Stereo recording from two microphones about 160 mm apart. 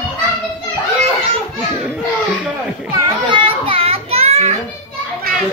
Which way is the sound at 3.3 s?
35° right (ahead or behind).